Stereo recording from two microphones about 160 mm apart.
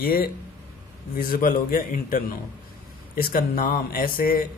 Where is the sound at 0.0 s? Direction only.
65° left (ahead or behind).